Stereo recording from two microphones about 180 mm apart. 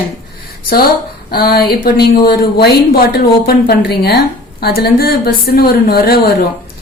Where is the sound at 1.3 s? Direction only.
55° left (ahead or behind).